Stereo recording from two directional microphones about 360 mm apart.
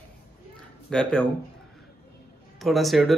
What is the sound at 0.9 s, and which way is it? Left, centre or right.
Speech, centre.